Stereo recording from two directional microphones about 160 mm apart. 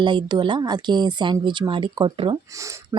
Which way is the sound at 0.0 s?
30° right (ahead or behind).